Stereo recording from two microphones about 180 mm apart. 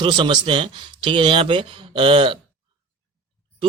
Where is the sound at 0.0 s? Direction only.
30° right (ahead or behind).